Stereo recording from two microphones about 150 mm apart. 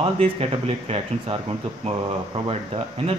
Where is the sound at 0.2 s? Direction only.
40° right (ahead or behind).